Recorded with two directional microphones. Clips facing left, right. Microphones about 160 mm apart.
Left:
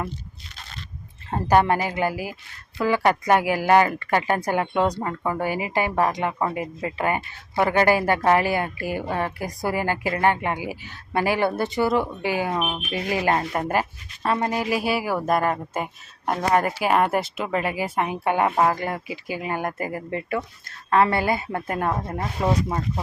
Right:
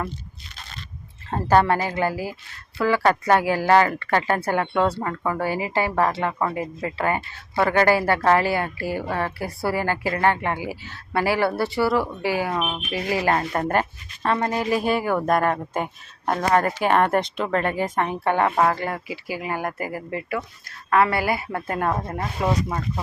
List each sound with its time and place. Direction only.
1.3 s speech: 15° left (ahead or behind)
12.5 s speech: 5° left (ahead or behind)
12.9 s a woman's voice: 20° left (ahead or behind)
13.6 s a woman's voice: 10° left (ahead or behind)